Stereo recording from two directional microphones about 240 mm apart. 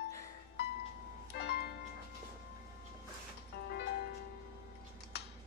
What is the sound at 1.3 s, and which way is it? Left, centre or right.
Music, left.